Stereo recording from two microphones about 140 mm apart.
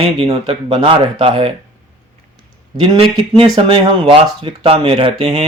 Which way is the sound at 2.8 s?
45° right (ahead or behind).